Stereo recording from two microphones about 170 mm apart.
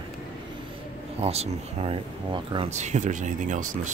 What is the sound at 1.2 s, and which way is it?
Speech, 35° right (ahead or behind).